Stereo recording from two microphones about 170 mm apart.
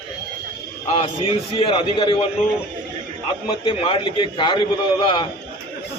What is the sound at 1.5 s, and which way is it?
Speech, 30° left (ahead or behind).